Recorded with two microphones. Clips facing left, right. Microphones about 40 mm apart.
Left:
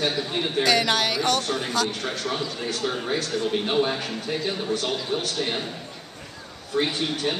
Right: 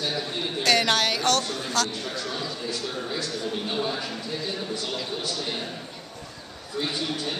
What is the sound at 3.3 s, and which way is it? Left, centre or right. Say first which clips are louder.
A man's voice: left 5 dB; left.